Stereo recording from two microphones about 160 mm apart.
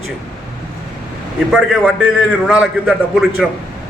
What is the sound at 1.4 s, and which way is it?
A man's voice, 5° right (ahead or behind).